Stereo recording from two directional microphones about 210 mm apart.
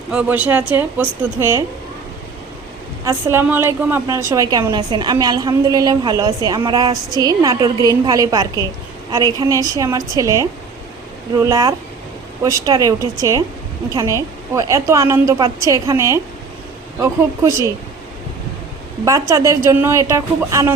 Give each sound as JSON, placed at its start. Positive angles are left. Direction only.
{"t": 0.1, "sound": "a woman's voice", "side_deg": -5}
{"t": 3.0, "sound": "a woman's voice", "side_deg": -15}
{"t": 11.4, "sound": "a woman's voice", "side_deg": -15}
{"t": 19.3, "sound": "a woman's voice", "side_deg": -15}